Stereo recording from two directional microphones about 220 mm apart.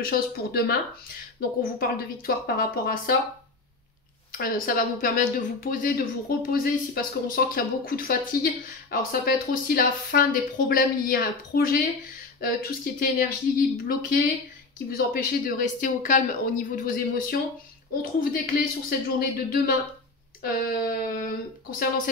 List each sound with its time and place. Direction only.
0.0 s speech: 45° left (ahead or behind)
4.3 s speech: 40° left (ahead or behind)